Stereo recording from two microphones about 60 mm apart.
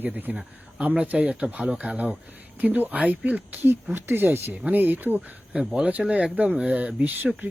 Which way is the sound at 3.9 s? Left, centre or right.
Right.